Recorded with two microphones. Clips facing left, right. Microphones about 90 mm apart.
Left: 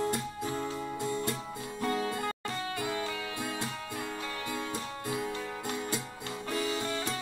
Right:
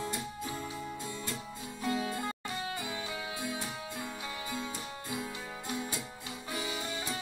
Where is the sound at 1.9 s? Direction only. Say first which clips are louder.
Left 1 dB; 15° right (ahead or behind).